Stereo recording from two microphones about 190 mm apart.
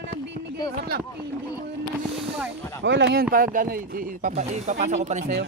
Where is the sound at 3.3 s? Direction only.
45° right (ahead or behind).